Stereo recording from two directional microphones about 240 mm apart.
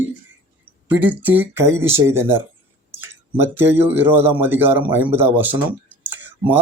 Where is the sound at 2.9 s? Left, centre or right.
Centre.